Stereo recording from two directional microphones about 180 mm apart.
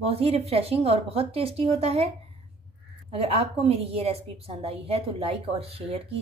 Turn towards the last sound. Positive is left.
turn(degrees=-35)  # may be behind; listen again after turning